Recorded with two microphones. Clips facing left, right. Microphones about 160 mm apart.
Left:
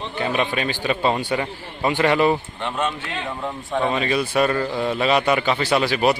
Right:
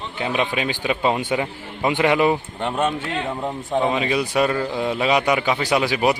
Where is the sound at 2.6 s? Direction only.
45° right (ahead or behind).